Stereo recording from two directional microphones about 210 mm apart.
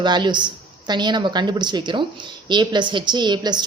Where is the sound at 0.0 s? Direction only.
20° right (ahead or behind).